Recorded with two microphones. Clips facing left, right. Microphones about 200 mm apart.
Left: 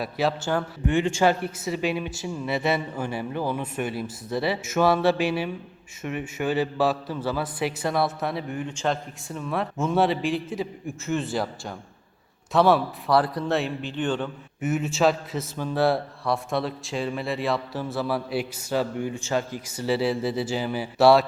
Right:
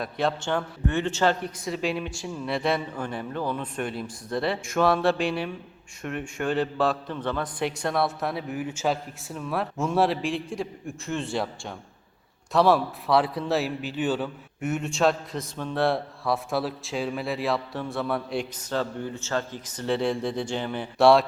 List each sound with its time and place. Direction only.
0.0 s a man's voice: 5° left (ahead or behind)